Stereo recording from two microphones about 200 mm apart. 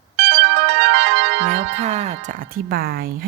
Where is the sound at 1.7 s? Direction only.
35° right (ahead or behind).